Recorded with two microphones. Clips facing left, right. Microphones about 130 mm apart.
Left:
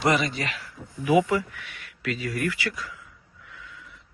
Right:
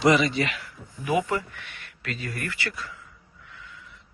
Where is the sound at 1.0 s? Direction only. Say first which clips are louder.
Left 4 dB; 5° left (ahead or behind).